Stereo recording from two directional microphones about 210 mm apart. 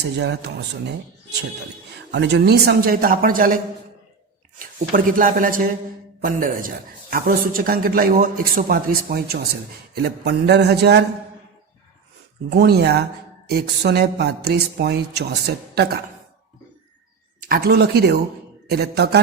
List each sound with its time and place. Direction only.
0.0 s a man's voice: 50° right (ahead or behind)
4.6 s a man's voice: 40° right (ahead or behind)
12.5 s a man's voice: 50° right (ahead or behind)
17.4 s a man's voice: 45° right (ahead or behind)